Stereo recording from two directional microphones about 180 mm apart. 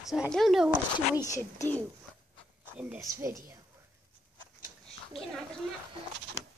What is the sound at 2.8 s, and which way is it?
Speech, 5° right (ahead or behind).